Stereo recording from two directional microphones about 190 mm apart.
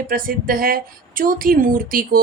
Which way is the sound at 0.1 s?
50° right (ahead or behind).